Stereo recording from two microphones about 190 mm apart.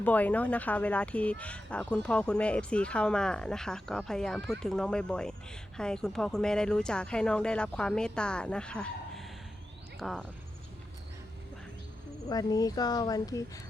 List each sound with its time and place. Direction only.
0.0 s speech: 10° left (ahead or behind)
12.3 s speech: 20° left (ahead or behind)